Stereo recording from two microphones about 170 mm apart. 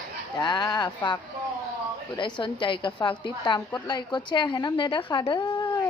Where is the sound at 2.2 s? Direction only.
30° left (ahead or behind).